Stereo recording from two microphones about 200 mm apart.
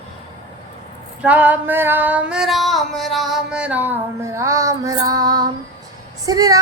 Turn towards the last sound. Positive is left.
turn(degrees=-20)  # may be behind; listen again after turning